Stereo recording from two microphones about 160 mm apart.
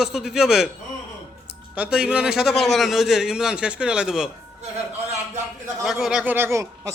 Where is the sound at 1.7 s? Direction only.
5° right (ahead or behind).